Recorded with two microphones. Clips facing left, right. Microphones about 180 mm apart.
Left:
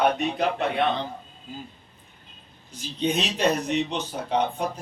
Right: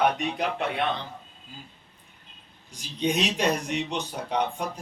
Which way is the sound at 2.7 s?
10° right (ahead or behind).